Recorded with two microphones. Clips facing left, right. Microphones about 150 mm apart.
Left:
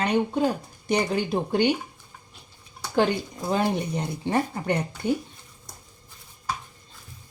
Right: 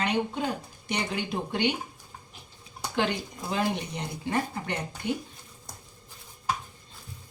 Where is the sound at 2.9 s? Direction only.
40° left (ahead or behind).